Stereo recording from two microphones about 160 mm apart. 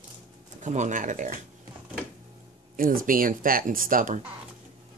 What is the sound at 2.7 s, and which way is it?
Speech, 60° right (ahead or behind).